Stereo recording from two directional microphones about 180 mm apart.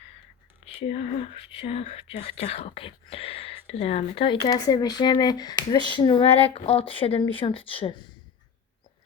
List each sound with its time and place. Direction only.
0.8 s speech: 35° left (ahead or behind)